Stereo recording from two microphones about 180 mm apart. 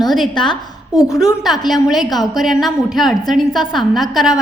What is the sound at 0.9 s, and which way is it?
Speech, 20° left (ahead or behind).